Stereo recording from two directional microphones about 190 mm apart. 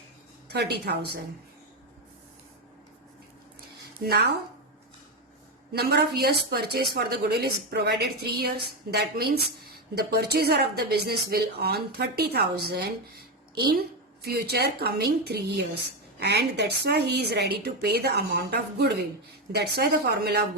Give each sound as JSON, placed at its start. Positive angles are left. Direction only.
{"t": 0.4, "sound": "a woman's voice", "side_deg": -60}
{"t": 4.0, "sound": "a woman's voice", "side_deg": -60}
{"t": 5.7, "sound": "a woman's voice", "side_deg": -60}